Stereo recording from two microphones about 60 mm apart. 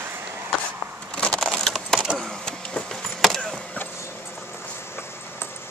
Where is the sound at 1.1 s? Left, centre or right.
Centre.